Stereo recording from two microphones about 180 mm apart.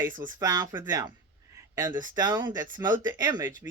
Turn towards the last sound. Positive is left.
turn(degrees=-15)  # may be behind; listen again after turning